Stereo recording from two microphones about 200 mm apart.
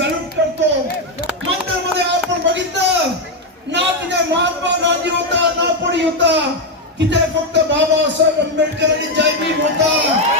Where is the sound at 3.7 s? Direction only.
60° right (ahead or behind).